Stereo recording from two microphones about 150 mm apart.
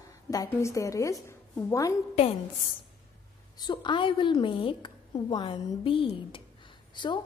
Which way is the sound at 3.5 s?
30° left (ahead or behind).